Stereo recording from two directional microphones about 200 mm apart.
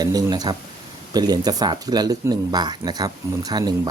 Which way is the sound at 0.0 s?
20° right (ahead or behind).